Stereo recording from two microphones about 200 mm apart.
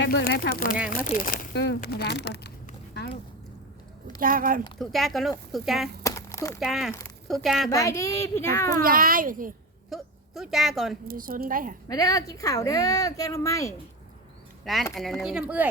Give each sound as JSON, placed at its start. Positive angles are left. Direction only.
{"t": 0.0, "sound": "speech", "side_deg": 50}
{"t": 4.2, "sound": "speech", "side_deg": -45}
{"t": 4.8, "sound": "speech", "side_deg": 0}
{"t": 6.0, "sound": "a sound", "side_deg": 15}
{"t": 6.6, "sound": "speech", "side_deg": 0}
{"t": 7.7, "sound": "speech", "side_deg": 15}
{"t": 8.8, "sound": "speech", "side_deg": -45}
{"t": 9.9, "sound": "speech", "side_deg": 0}
{"t": 11.1, "sound": "speech", "side_deg": -45}
{"t": 11.9, "sound": "speech", "side_deg": 15}
{"t": 14.6, "sound": "speech", "side_deg": 0}